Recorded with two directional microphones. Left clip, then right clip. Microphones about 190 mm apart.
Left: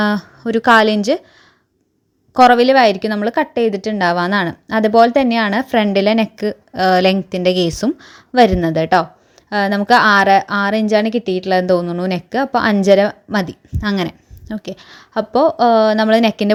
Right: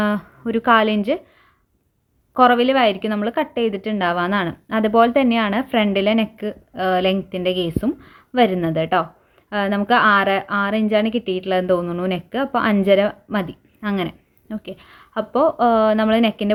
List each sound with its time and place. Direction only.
0.0 s speech: 40° left (ahead or behind)
2.3 s a woman's voice: 40° left (ahead or behind)